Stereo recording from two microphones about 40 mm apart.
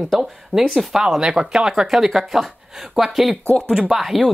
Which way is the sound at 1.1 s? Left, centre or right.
Centre.